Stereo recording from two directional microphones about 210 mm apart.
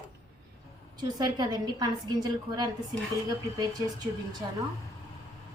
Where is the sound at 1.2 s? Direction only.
20° right (ahead or behind).